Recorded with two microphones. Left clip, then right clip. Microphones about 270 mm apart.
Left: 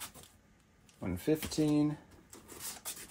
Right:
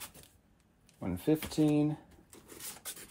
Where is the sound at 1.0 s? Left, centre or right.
Right.